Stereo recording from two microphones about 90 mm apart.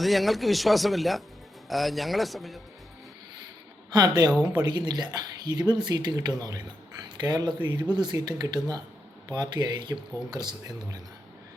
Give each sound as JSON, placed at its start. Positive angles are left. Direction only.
{"t": 0.0, "sound": "speech", "side_deg": 0}
{"t": 3.9, "sound": "speech", "side_deg": -50}
{"t": 4.3, "sound": "speech", "side_deg": -10}
{"t": 4.5, "sound": "speech", "side_deg": -50}